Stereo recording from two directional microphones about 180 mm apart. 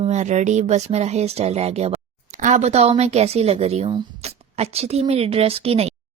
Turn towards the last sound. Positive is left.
turn(degrees=-35)  # may be behind; listen again after turning